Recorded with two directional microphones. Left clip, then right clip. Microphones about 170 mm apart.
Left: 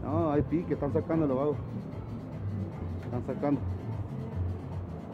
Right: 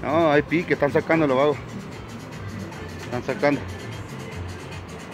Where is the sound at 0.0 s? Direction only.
20° right (ahead or behind).